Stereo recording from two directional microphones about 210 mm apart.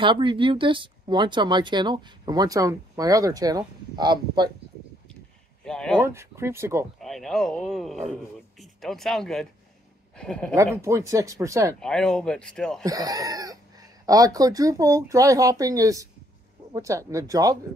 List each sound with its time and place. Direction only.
0.0 s speech: 25° right (ahead or behind)
5.6 s speech: 5° left (ahead or behind)
5.9 s speech: 10° right (ahead or behind)
7.0 s speech: centre (ahead or behind)
10.5 s speech: 15° right (ahead or behind)
11.8 s speech: 5° left (ahead or behind)
12.8 s speech: 15° right (ahead or behind)